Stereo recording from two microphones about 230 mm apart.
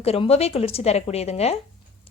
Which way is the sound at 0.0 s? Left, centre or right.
Left.